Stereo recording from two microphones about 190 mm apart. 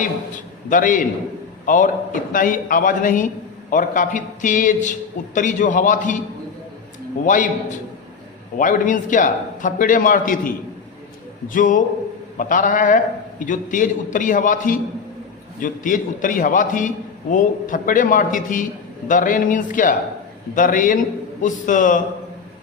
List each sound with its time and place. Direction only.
0.0 s a man's voice: 45° left (ahead or behind)
7.3 s a man's voice: 40° left (ahead or behind)
8.5 s a man's voice: 45° left (ahead or behind)